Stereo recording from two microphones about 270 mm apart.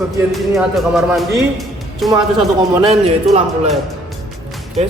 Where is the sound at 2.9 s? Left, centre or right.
Right.